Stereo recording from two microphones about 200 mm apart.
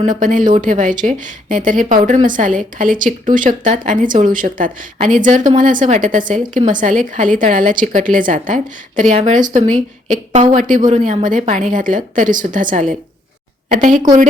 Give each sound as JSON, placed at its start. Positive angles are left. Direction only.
{"t": 0.0, "sound": "a woman's voice", "side_deg": -40}